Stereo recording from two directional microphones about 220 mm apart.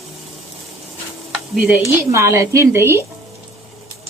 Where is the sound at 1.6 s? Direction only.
5° right (ahead or behind).